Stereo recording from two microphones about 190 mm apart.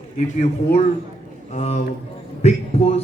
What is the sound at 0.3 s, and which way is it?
A man's voice, 35° left (ahead or behind).